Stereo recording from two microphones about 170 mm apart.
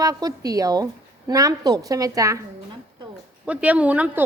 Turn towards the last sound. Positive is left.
turn(degrees=-10)  # may be behind; listen again after turning